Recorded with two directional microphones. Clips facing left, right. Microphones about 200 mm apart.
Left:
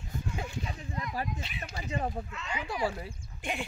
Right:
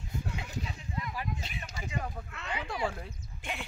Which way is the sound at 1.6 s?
40° left (ahead or behind).